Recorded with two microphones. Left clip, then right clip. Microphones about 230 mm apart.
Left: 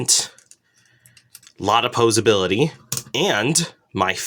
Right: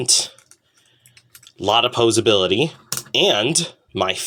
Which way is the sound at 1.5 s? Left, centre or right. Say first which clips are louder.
Right 1 dB; left.